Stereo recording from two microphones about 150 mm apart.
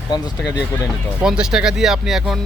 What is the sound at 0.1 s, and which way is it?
Speech, 30° left (ahead or behind).